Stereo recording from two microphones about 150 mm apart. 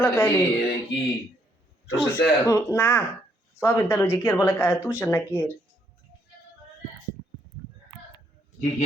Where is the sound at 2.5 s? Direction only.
15° left (ahead or behind).